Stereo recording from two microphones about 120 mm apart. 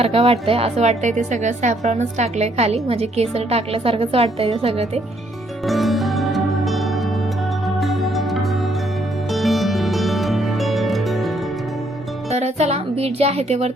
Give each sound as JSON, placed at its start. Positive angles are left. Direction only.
{"t": 0.0, "sound": "a woman's voice", "side_deg": -55}
{"t": 5.6, "sound": "music", "side_deg": 0}
{"t": 12.3, "sound": "music", "side_deg": -65}